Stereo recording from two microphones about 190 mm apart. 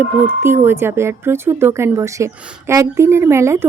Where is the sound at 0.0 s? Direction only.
10° right (ahead or behind).